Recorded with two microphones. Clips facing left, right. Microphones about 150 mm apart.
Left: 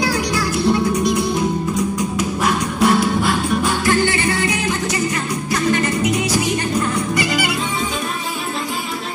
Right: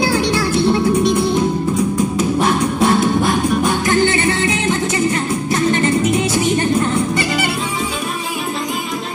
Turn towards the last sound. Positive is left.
turn(degrees=-25)  # may be behind; listen again after turning